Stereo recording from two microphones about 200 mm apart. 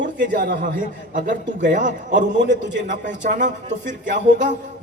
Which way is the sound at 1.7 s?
40° right (ahead or behind).